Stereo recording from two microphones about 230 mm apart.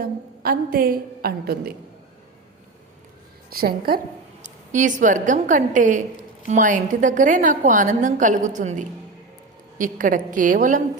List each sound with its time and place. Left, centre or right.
0.0 s a woman's voice: right
3.5 s a woman's voice: right